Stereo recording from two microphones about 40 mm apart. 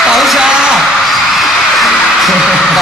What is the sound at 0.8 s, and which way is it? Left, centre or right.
Music, centre.